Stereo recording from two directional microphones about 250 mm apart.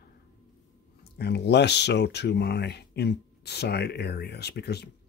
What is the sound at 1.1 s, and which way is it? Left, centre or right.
Speech, left.